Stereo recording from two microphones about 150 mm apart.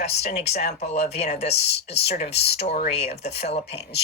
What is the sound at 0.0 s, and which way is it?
Speech, 45° left (ahead or behind).